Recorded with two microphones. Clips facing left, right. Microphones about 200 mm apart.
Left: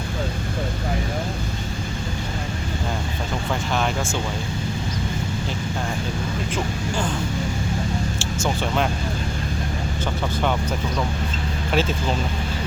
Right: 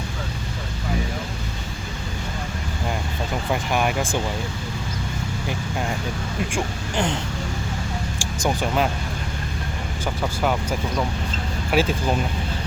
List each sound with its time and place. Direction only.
3.5 s music: 10° right (ahead or behind)
6.5 s speech: 20° right (ahead or behind)
8.4 s speech: 15° right (ahead or behind)
11.7 s speech: 10° right (ahead or behind)